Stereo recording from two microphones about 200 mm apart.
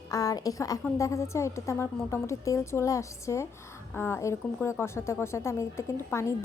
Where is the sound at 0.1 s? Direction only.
20° left (ahead or behind).